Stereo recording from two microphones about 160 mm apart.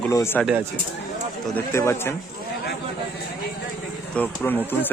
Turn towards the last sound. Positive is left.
turn(degrees=10)  # may be behind; listen again after turning